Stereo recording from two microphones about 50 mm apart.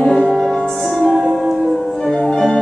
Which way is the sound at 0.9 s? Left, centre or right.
Centre.